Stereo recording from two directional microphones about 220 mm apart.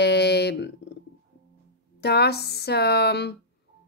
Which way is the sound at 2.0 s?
50° left (ahead or behind).